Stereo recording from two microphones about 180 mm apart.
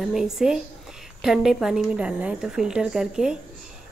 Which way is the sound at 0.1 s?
5° right (ahead or behind).